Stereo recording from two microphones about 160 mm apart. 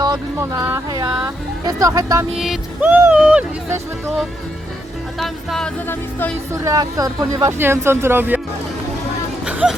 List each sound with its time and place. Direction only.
0.0 s speech: 25° right (ahead or behind)
2.4 s speech: 5° right (ahead or behind)
5.2 s music: centre (ahead or behind)
5.9 s music: 15° left (ahead or behind)
6.5 s speech: 20° right (ahead or behind)
9.5 s speech: 5° right (ahead or behind)